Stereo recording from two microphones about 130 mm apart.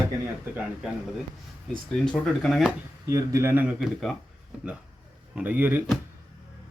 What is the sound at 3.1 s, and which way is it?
Speech, 25° right (ahead or behind).